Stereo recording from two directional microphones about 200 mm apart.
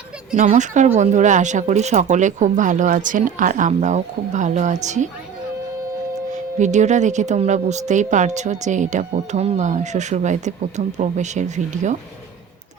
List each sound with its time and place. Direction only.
0.3 s speech: 35° right (ahead or behind)
6.3 s speech: 35° right (ahead or behind)